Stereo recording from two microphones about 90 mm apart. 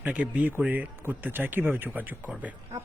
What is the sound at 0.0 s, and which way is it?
A man's voice, 15° right (ahead or behind).